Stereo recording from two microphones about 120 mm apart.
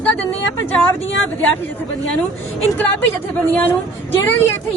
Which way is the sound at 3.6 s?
15° left (ahead or behind).